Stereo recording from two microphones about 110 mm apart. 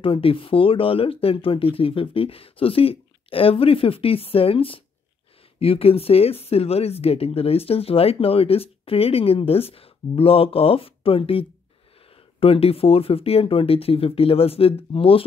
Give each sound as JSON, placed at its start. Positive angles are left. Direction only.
{"t": 0.0, "sound": "speech", "side_deg": 55}